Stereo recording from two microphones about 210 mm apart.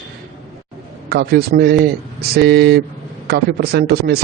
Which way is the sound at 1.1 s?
50° right (ahead or behind).